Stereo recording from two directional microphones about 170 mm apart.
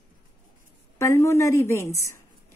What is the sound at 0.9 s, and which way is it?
Speech, 15° left (ahead or behind).